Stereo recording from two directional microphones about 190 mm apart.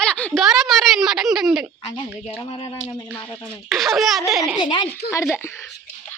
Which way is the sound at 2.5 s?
30° left (ahead or behind).